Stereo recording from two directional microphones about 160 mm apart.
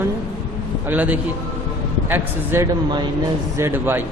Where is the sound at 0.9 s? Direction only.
10° right (ahead or behind).